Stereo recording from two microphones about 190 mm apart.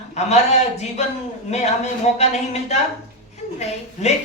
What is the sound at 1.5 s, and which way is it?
A man's voice, 35° left (ahead or behind).